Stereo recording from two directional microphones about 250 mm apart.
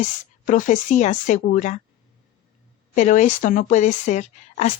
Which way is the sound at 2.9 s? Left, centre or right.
Left.